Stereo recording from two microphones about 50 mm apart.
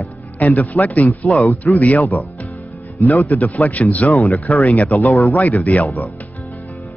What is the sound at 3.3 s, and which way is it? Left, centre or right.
Speech, left.